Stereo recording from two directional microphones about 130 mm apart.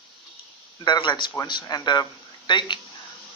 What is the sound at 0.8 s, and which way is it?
Speech, 35° left (ahead or behind).